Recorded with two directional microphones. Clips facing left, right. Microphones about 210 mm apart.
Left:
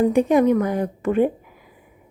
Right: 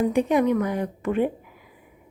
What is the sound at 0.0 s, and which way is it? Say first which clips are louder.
A woman's voice: left 4 dB; 45° left (ahead or behind).